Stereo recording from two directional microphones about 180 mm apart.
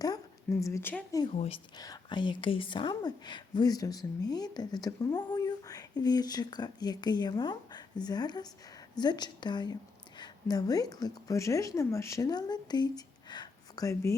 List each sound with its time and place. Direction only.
0.6 s speech: 15° left (ahead or behind)
1.2 s speech: 30° left (ahead or behind)
13.3 s a sound: 20° left (ahead or behind)